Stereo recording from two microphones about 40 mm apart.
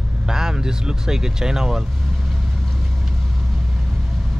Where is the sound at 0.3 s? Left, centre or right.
Centre.